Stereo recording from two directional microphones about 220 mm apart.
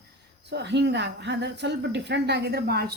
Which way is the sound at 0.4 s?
50° right (ahead or behind).